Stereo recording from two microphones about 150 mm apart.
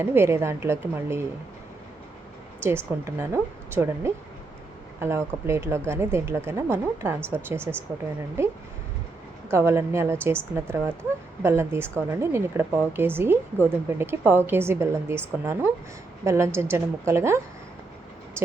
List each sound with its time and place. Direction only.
0.0 s a woman's voice: 15° right (ahead or behind)
2.6 s a woman's voice: 15° right (ahead or behind)